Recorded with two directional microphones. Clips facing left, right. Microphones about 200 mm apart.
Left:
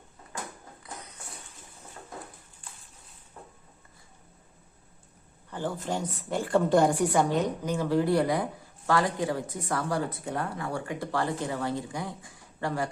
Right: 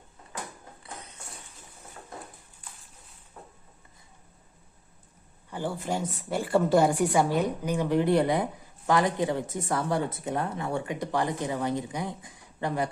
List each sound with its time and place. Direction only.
5.5 s a woman's voice: 10° right (ahead or behind)